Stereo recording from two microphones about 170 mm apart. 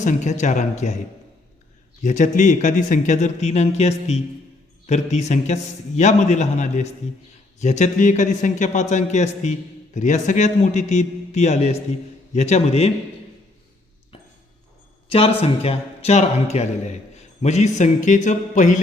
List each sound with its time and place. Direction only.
0.0 s a man's voice: 45° left (ahead or behind)
2.0 s a man's voice: 45° left (ahead or behind)
15.1 s a man's voice: 35° left (ahead or behind)